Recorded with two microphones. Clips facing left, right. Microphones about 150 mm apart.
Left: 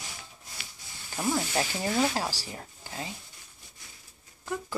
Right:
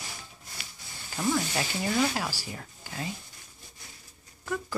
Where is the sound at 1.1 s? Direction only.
25° left (ahead or behind).